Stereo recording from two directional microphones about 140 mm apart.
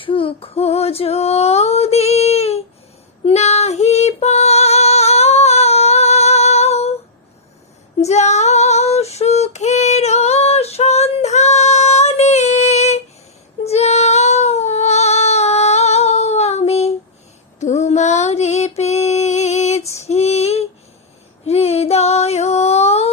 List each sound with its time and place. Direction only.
0.0 s female singing: 40° left (ahead or behind)
8.0 s female singing: 55° left (ahead or behind)
13.7 s child singing: 50° left (ahead or behind)
17.6 s female singing: 55° left (ahead or behind)
21.4 s a sound: 50° left (ahead or behind)